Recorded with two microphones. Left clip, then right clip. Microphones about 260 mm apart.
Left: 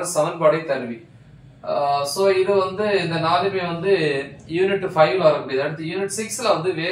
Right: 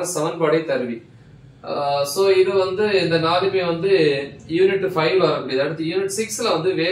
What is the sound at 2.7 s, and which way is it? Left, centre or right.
A man's voice, centre.